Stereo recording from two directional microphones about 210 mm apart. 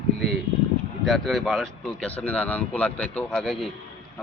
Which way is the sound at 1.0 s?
Centre (ahead or behind).